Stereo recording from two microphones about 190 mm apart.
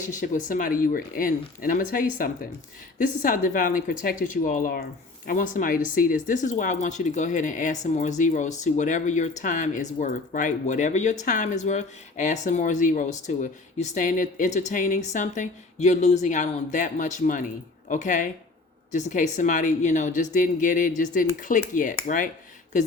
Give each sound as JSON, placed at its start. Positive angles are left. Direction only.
{"t": 0.1, "sound": "speech", "side_deg": 45}